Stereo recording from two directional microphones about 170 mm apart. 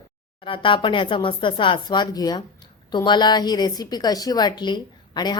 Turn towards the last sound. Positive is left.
turn(degrees=25)  # may be behind; listen again after turning